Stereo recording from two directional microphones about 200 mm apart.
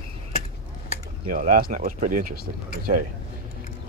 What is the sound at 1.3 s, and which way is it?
Speech, 45° right (ahead or behind).